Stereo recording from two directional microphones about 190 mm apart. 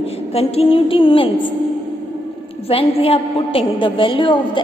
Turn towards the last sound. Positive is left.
turn(degrees=25)  # may be behind; listen again after turning